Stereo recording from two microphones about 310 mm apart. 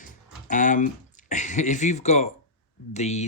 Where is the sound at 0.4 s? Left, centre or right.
Left.